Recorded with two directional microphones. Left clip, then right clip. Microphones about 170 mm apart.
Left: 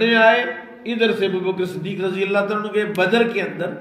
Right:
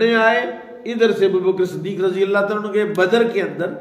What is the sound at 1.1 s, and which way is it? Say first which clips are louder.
Speech: right 5 dB; 65° right (ahead or behind).